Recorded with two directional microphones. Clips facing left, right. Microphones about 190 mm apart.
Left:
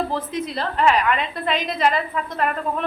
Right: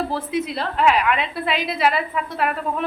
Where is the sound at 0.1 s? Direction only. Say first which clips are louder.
Right 2 dB; 5° right (ahead or behind).